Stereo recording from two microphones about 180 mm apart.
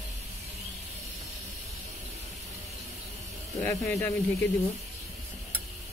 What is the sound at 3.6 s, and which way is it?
Speech, 15° left (ahead or behind).